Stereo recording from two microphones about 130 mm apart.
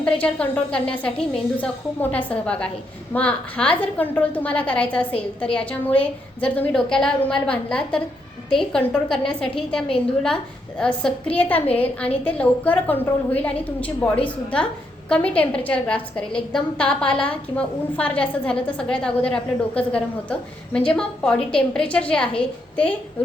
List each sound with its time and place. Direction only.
0.0 s a woman's voice: 10° left (ahead or behind)